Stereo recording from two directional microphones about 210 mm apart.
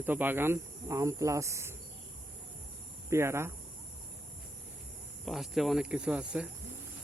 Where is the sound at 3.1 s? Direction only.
10° right (ahead or behind).